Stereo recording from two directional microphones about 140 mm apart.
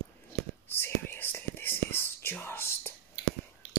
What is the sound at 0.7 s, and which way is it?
Whispering, 15° left (ahead or behind).